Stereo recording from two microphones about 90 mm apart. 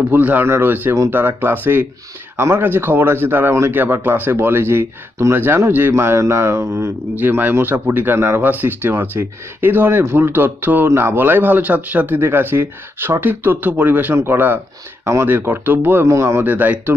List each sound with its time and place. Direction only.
0.1 s speech: 20° right (ahead or behind)